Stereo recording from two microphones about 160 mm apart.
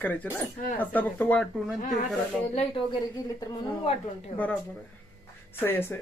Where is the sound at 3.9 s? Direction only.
40° left (ahead or behind).